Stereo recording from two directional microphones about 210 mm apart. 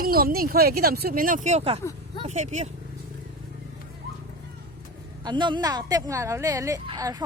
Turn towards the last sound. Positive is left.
turn(degrees=-15)  # may be behind; listen again after turning